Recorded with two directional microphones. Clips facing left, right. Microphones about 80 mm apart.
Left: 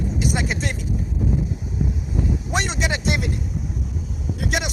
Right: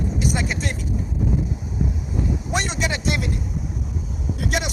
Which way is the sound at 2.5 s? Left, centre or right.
Left.